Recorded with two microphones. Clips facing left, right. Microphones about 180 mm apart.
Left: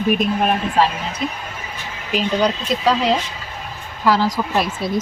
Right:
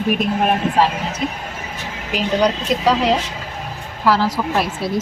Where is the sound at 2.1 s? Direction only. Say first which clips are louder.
Right 1 dB; 10° right (ahead or behind).